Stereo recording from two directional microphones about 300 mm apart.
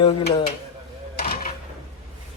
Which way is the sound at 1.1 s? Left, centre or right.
Left.